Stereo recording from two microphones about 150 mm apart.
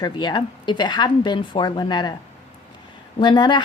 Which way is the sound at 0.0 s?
30° left (ahead or behind).